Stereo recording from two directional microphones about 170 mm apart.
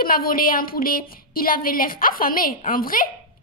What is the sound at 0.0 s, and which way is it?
A woman's voice, 55° left (ahead or behind).